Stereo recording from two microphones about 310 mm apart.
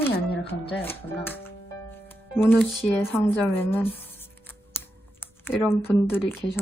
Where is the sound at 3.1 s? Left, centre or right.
Centre.